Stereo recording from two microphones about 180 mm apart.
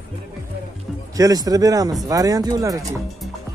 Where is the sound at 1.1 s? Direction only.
20° right (ahead or behind).